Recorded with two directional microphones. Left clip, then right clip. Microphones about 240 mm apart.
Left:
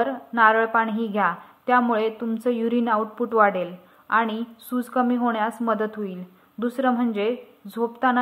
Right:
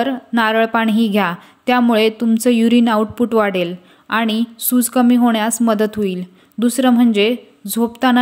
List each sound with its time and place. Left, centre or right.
0.0 s a woman's voice: right